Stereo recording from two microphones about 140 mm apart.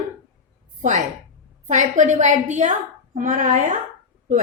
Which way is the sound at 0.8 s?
60° right (ahead or behind).